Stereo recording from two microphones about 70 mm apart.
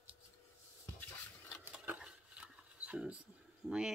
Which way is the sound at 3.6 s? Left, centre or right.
Left.